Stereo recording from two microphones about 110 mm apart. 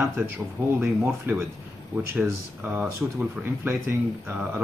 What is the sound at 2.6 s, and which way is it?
Speech, 20° right (ahead or behind).